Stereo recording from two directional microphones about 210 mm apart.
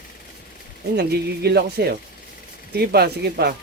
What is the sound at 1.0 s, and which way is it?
Speech, 50° right (ahead or behind).